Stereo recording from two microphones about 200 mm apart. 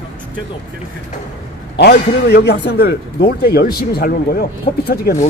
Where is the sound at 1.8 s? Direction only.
55° left (ahead or behind).